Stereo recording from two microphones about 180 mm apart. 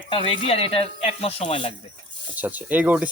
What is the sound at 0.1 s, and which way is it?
Speech, 30° left (ahead or behind).